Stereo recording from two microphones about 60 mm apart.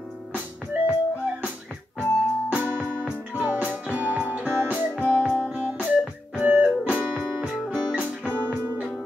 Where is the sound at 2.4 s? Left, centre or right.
Right.